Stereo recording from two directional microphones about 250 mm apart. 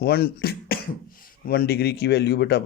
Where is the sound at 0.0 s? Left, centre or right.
Left.